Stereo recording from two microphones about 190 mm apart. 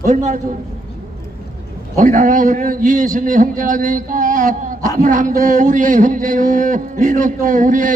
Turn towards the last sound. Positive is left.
turn(degrees=-45)  # may be behind; listen again after turning